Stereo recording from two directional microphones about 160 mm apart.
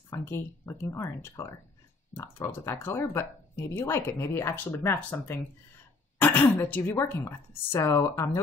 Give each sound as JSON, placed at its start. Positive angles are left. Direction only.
{"t": 0.1, "sound": "speech", "side_deg": 15}